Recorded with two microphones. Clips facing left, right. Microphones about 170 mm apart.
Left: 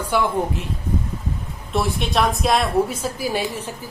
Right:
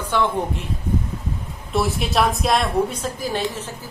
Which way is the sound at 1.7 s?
Centre (ahead or behind).